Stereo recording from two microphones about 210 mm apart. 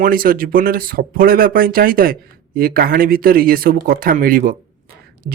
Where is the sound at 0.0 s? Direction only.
45° right (ahead or behind).